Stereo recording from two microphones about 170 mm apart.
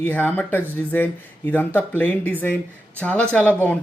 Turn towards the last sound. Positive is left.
turn(degrees=10)  # may be behind; listen again after turning